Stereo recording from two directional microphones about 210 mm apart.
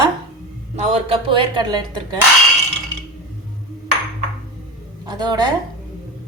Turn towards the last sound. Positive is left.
turn(degrees=-20)  # may be behind; listen again after turning